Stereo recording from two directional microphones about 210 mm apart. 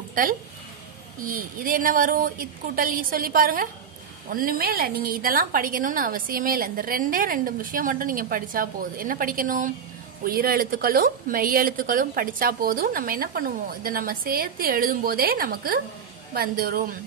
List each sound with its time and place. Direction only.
0.1 s a woman's voice: 40° right (ahead or behind)